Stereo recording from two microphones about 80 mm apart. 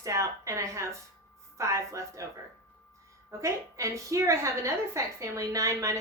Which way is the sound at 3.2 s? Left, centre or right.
Right.